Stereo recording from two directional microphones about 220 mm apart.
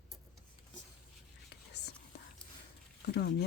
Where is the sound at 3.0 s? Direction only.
50° left (ahead or behind).